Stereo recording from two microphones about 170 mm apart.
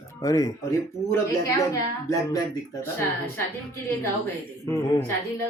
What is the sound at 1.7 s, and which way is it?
A woman's voice, 20° left (ahead or behind).